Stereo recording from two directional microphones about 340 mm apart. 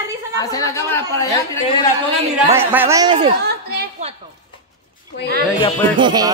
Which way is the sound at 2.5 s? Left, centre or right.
Centre.